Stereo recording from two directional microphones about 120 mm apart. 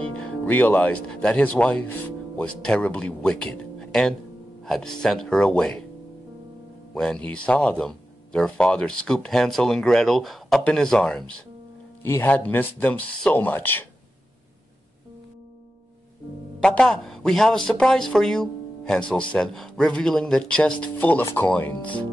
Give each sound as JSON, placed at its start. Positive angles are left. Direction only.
{"t": 0.2, "sound": "speech", "side_deg": 15}
{"t": 6.9, "sound": "speech", "side_deg": 10}
{"t": 12.0, "sound": "speech", "side_deg": 20}
{"t": 16.5, "sound": "a man's voice", "side_deg": 5}